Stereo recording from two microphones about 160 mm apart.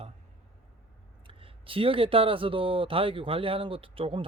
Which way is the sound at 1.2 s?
35° right (ahead or behind).